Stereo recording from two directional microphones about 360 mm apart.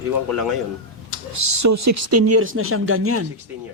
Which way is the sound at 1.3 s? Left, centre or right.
Right.